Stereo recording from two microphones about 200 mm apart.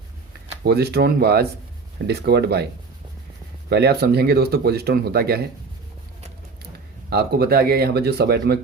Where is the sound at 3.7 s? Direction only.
55° right (ahead or behind).